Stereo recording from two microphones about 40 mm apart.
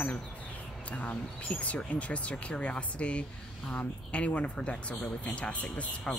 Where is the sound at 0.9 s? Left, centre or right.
Left.